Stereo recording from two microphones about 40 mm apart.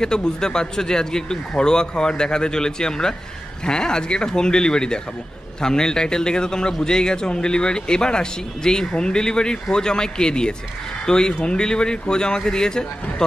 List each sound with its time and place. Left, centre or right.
0.0 s speech: centre